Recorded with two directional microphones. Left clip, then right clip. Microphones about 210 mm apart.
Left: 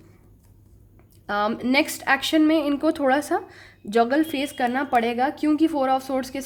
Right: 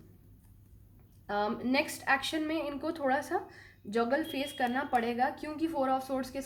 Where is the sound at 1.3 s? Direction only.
45° left (ahead or behind).